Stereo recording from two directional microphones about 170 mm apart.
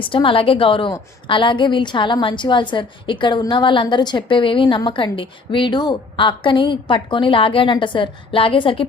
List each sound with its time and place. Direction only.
0.0 s a woman's voice: 30° left (ahead or behind)